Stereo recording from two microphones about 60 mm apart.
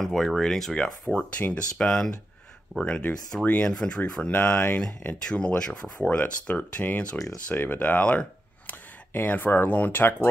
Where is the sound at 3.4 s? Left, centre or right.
Left.